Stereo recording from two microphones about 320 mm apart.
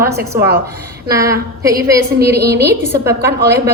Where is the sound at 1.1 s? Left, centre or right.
Centre.